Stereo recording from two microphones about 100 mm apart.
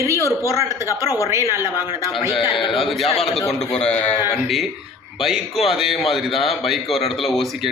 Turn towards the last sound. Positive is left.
turn(degrees=0)  # may be behind; listen again after turning